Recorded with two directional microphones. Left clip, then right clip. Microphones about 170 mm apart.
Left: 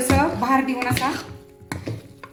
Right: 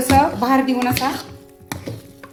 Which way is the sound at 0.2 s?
50° right (ahead or behind).